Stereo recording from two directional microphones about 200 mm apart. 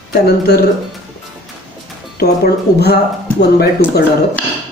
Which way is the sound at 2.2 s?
55° left (ahead or behind).